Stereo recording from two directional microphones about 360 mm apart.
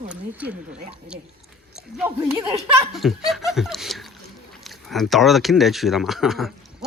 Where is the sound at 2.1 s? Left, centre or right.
Centre.